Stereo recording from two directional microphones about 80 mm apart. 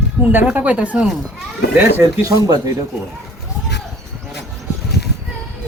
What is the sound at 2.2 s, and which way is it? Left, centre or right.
Speech, right.